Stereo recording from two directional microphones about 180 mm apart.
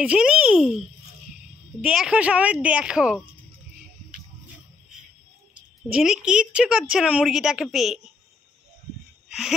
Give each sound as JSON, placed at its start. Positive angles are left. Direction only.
{"t": 0.0, "sound": "a woman's voice", "side_deg": -5}
{"t": 5.9, "sound": "a woman's voice", "side_deg": -5}